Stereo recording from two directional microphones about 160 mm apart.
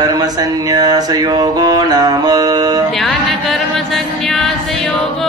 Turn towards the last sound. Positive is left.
turn(degrees=0)  # may be behind; listen again after turning